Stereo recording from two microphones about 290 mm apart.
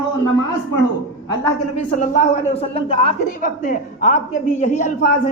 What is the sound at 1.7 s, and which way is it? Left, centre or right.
A woman's voice, left.